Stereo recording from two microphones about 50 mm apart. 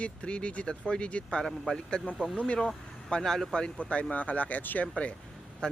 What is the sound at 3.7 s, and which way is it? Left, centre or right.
Speech, left.